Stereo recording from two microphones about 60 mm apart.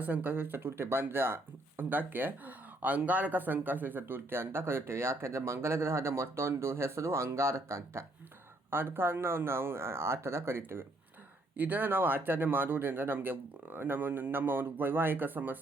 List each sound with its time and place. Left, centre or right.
0.0 s speech: right
8.7 s speech: right
11.5 s speech: right